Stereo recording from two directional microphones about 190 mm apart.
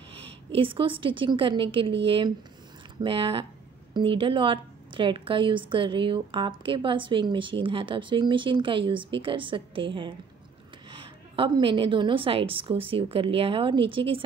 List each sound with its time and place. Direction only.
0.5 s a woman's voice: 30° right (ahead or behind)